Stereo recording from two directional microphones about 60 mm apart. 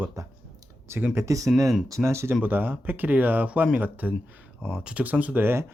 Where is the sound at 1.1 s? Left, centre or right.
Right.